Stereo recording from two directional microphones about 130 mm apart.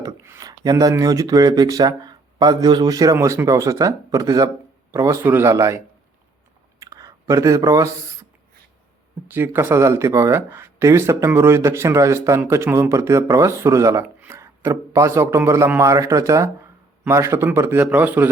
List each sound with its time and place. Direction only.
0.0 s speech: 25° right (ahead or behind)
6.7 s a sound: 25° right (ahead or behind)
9.2 s a man's voice: 15° right (ahead or behind)